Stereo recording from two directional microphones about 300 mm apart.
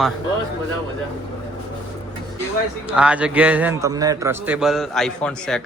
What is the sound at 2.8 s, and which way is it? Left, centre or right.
A man's voice, centre.